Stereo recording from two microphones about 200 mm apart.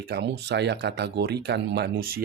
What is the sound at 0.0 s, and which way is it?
Speech, 55° right (ahead or behind).